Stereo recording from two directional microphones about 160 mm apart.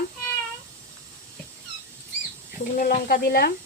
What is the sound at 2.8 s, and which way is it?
Speech, 60° left (ahead or behind).